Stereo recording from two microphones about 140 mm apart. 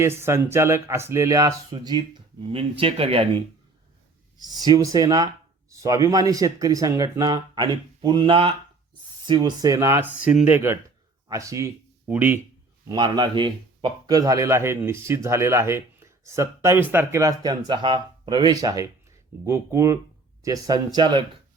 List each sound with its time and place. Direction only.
0.0 s a man's voice: 20° right (ahead or behind); by 3.4 s 40° right (ahead or behind)
4.4 s a man's voice: 30° right (ahead or behind); by 12.4 s 10° right (ahead or behind)
12.9 s a man's voice: 35° right (ahead or behind)